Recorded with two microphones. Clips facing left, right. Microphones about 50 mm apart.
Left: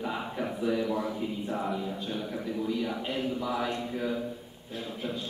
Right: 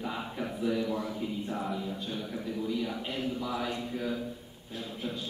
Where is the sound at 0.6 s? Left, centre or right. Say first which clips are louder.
Left 2 dB; centre.